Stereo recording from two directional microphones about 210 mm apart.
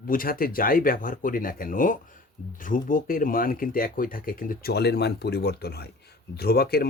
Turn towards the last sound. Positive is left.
turn(degrees=50)  # may be behind; listen again after turning